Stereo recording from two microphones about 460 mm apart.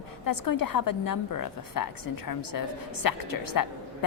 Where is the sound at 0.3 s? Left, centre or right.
Left.